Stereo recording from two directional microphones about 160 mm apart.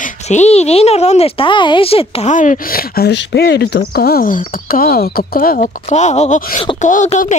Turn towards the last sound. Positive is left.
turn(degrees=50)  # may be behind; listen again after turning